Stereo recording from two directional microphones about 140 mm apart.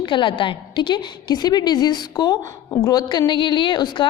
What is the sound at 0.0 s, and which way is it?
A woman's voice, 35° left (ahead or behind).